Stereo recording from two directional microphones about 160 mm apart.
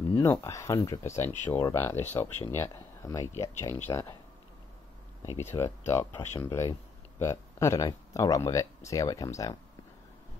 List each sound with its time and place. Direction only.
0.1 s speech: 15° left (ahead or behind)
5.2 s speech: 15° left (ahead or behind)